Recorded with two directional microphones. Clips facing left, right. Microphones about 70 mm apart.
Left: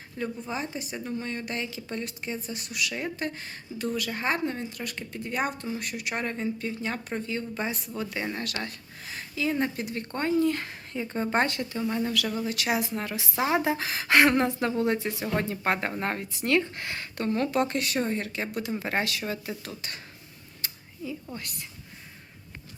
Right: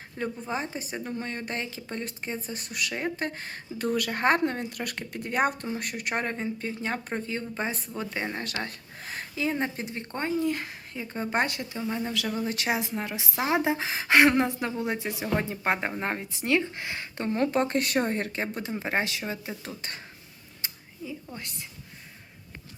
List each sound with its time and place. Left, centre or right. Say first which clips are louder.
0.4 s a woman's voice: right 1 dB; right
8.6 s speech: even; right; by 11.4 s centre
11.4 s speech: left 2 dB; centre
12.1 s a woman's voice: left 1 dB; right
17.7 s a woman's voice: right 2 dB; right
20.6 s a sound: even; right
21.3 s a woman's voice: left 1 dB; right